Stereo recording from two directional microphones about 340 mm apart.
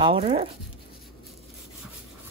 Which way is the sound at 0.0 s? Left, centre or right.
Centre.